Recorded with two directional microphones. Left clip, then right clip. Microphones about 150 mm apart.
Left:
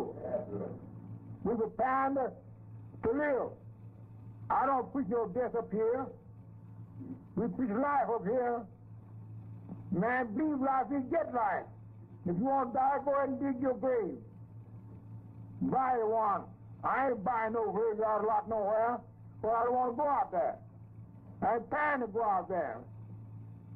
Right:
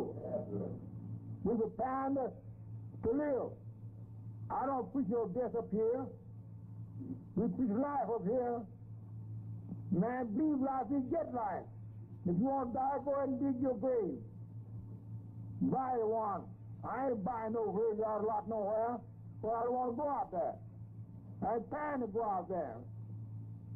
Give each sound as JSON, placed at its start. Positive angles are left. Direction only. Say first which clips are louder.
{"t": 0.0, "sound": "didgeridoo", "louder": "left 3 dB", "side_deg": -30}
{"t": 1.4, "sound": "a man's voice", "louder": "left 4 dB", "side_deg": -30}
{"t": 7.3, "sound": "a man's voice", "louder": "left 2 dB", "side_deg": -30}
{"t": 9.7, "sound": "a man's voice", "louder": "left 5 dB", "side_deg": -25}
{"t": 15.6, "sound": "a man's voice", "louder": "left 4 dB", "side_deg": -25}